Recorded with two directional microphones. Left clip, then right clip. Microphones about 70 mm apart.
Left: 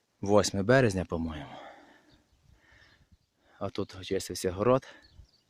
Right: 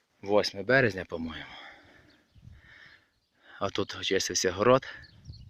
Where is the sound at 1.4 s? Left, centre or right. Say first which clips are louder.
Right 1 dB; left.